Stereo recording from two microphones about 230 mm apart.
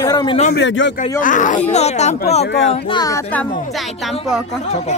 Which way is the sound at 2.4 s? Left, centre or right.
Left.